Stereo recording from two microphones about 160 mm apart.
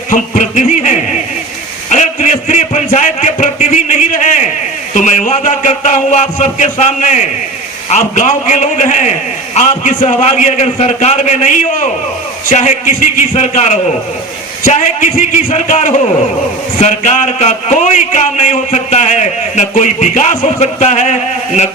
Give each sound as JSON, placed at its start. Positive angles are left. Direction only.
{"t": 0.1, "sound": "a man's voice", "side_deg": 50}